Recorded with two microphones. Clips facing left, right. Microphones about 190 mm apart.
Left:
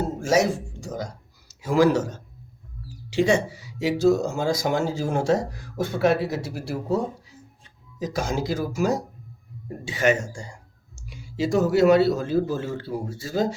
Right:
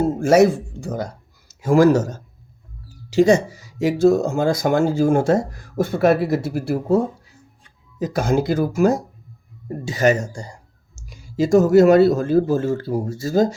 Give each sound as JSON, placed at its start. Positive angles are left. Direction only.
{"t": 0.0, "sound": "speech", "side_deg": -55}
{"t": 9.6, "sound": "speech", "side_deg": -40}